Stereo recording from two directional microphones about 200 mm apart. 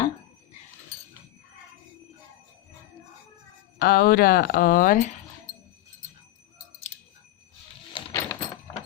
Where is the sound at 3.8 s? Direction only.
50° left (ahead or behind).